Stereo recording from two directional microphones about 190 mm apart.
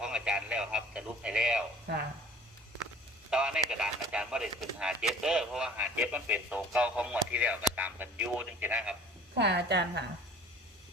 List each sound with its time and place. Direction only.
0.0 s radio: 5° right (ahead or behind)
3.2 s speech: 5° right (ahead or behind)
9.3 s a woman's voice: 60° right (ahead or behind)